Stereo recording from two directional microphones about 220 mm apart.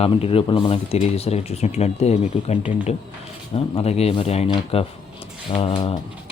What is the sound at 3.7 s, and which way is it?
Speech, 30° left (ahead or behind).